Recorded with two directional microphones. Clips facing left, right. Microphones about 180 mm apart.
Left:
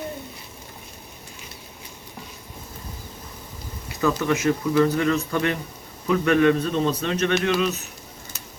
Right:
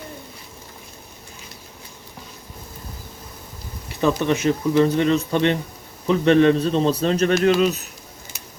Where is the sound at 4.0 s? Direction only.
25° right (ahead or behind).